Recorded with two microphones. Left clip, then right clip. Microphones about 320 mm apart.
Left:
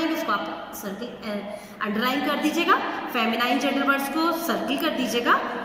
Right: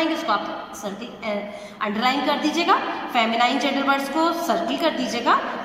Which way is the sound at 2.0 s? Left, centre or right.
Right.